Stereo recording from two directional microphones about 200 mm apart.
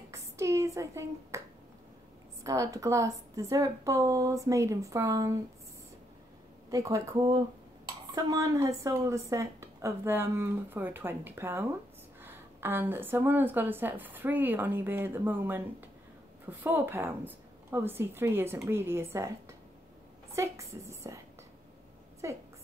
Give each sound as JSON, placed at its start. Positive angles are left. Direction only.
{"t": 0.1, "sound": "finger snapping", "side_deg": -15}
{"t": 2.4, "sound": "a woman's voice", "side_deg": -15}
{"t": 6.7, "sound": "a woman's voice", "side_deg": -15}
{"t": 22.2, "sound": "a woman's voice", "side_deg": -15}